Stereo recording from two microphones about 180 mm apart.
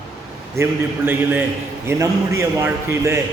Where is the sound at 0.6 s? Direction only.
10° right (ahead or behind).